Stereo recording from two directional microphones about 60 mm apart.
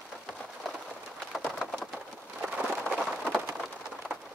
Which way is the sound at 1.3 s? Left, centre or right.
Centre.